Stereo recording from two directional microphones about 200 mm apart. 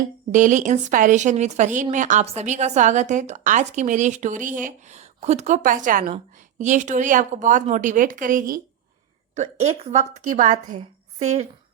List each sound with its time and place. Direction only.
0.3 s speech: 40° right (ahead or behind)